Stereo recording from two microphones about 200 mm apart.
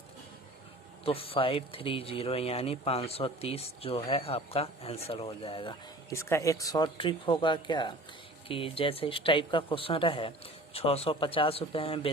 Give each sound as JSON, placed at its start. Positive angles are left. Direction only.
{"t": 1.0, "sound": "speech", "side_deg": 30}
{"t": 6.1, "sound": "speech", "side_deg": 15}